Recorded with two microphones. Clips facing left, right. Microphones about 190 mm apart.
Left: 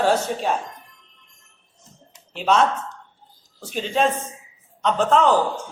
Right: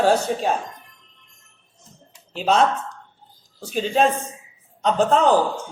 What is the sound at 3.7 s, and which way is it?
A woman's voice, 35° right (ahead or behind).